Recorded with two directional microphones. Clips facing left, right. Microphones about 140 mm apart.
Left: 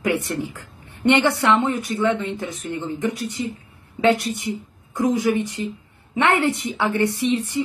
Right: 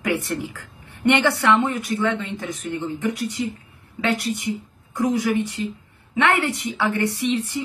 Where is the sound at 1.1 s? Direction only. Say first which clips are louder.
Left 1 dB; 20° left (ahead or behind).